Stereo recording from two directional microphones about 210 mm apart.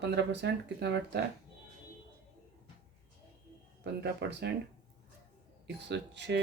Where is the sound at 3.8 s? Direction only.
55° right (ahead or behind).